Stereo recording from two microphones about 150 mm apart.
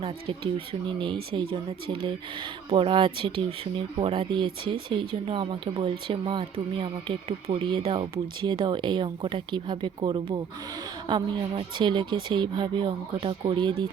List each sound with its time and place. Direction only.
0.0 s speech: 40° right (ahead or behind)